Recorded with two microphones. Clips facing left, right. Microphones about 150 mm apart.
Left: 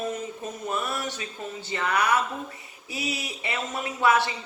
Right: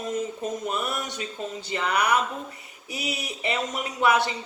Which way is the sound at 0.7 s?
20° right (ahead or behind).